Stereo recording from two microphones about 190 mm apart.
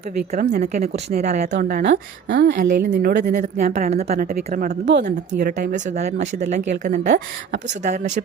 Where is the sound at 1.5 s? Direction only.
55° right (ahead or behind).